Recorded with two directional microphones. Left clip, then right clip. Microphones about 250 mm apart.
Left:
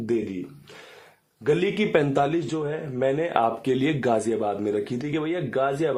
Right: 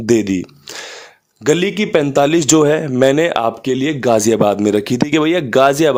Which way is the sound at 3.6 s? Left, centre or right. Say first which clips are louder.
Right 8 dB; right.